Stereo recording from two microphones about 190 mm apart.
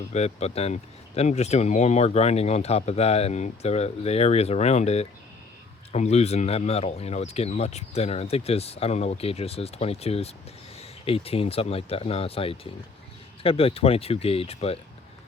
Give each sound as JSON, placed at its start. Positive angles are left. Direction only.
{"t": 0.1, "sound": "speech", "side_deg": 35}